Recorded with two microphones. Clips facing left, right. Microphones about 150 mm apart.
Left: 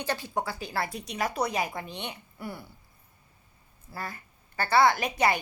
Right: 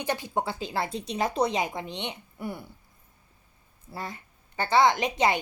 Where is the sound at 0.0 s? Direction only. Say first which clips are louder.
Right 2 dB; 20° right (ahead or behind).